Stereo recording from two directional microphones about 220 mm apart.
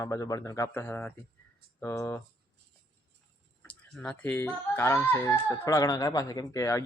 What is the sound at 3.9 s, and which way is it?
Speech, 5° left (ahead or behind).